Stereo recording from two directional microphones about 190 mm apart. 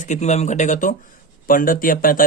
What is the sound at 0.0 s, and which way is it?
Speech, 40° left (ahead or behind).